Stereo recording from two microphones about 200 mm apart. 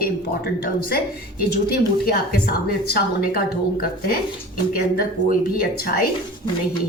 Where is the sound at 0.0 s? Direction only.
50° left (ahead or behind).